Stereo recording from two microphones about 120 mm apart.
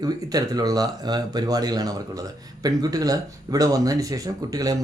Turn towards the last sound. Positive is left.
turn(degrees=-30)  # may be behind; listen again after turning